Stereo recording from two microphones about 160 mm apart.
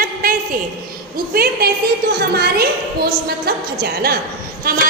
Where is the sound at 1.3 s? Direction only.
80° right.